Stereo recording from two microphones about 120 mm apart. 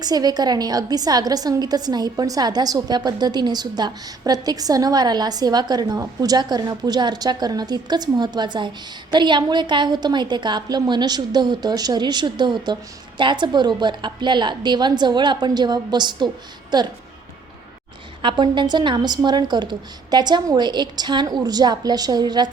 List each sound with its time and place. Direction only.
0.0 s a woman's voice: 35° right (ahead or behind)
18.2 s a woman's voice: 40° right (ahead or behind)